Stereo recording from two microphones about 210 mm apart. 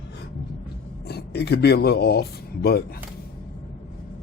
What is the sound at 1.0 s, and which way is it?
Speech, 50° left (ahead or behind).